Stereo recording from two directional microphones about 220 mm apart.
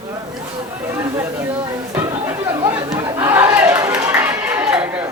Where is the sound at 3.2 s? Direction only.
10° right (ahead or behind).